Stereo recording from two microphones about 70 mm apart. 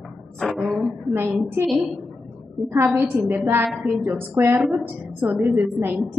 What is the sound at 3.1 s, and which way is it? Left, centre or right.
Speech, right.